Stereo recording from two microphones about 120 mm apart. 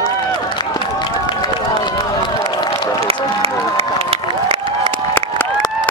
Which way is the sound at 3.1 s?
55° right (ahead or behind).